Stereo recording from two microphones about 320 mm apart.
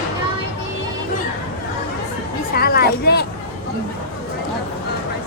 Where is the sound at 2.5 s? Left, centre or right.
Left.